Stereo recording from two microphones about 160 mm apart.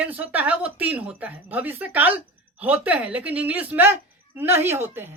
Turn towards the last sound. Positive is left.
turn(degrees=-15)  # may be behind; listen again after turning